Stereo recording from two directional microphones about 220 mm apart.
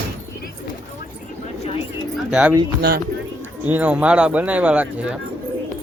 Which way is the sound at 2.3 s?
5° right (ahead or behind).